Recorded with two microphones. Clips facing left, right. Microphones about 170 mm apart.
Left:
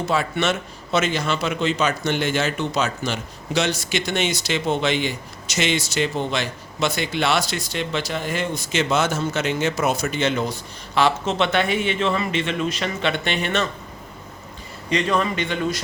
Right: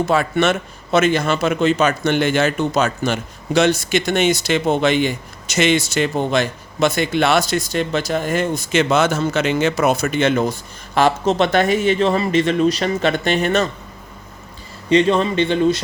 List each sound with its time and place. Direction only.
0.1 s a man's voice: 55° right (ahead or behind)
14.8 s speech: 30° right (ahead or behind)